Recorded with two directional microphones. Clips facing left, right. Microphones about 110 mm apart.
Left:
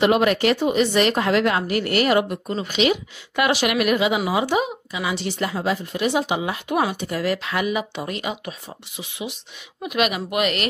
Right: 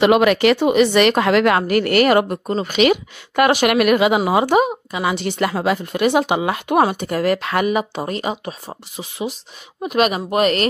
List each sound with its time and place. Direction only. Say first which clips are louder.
0.0 s speech: right 4 dB; 90° right; by 10.7 s 40° right (ahead or behind)